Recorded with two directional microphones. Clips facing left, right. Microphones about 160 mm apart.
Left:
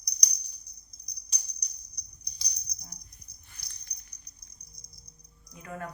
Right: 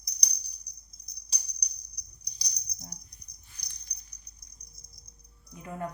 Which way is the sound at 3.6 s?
15° right (ahead or behind).